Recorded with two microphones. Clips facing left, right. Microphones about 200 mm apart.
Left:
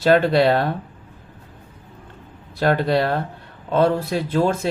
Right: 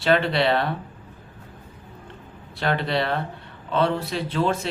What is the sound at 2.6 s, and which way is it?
Speech, 45° left (ahead or behind).